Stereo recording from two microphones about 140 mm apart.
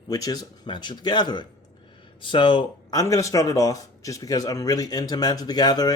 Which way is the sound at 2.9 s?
25° left (ahead or behind).